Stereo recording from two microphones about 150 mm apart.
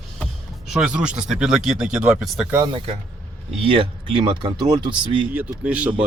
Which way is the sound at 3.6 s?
35° right (ahead or behind).